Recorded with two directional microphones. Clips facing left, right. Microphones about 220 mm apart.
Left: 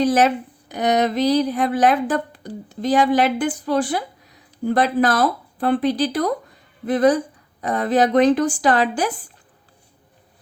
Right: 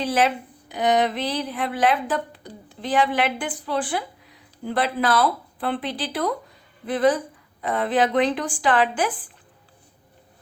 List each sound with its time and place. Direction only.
0.0 s speech: 45° left (ahead or behind)